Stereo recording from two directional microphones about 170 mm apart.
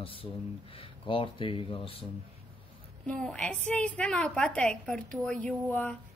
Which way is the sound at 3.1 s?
5° left (ahead or behind).